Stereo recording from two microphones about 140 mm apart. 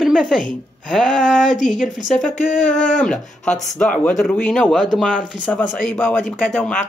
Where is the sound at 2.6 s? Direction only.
65° left (ahead or behind).